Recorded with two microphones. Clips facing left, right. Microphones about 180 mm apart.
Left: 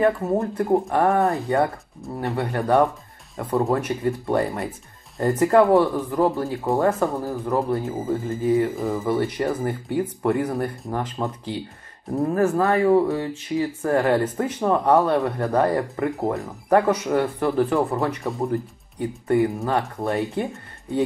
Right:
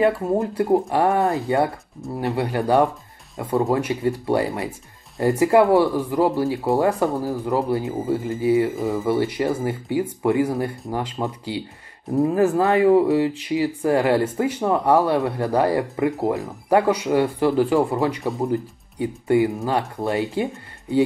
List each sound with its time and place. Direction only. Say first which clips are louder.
0.0 s speech: right 1 dB; 10° right (ahead or behind)
3.3 s speech: right 1 dB; centre (ahead or behind)